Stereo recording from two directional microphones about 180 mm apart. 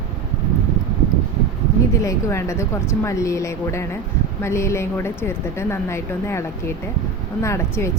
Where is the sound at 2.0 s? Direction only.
15° left (ahead or behind).